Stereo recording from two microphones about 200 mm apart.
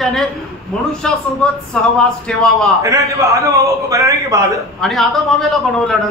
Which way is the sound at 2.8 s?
15° right (ahead or behind).